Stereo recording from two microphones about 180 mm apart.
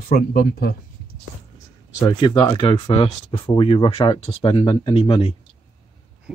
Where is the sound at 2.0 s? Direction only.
25° left (ahead or behind).